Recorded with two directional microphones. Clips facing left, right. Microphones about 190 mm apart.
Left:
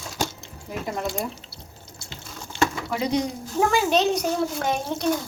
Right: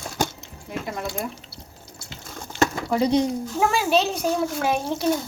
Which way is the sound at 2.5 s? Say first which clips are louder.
Right 3 dB; 40° right (ahead or behind).